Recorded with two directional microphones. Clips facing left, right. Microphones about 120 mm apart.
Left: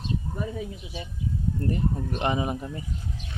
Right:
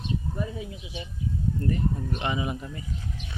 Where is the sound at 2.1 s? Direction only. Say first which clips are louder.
Left 3 dB; 40° left (ahead or behind).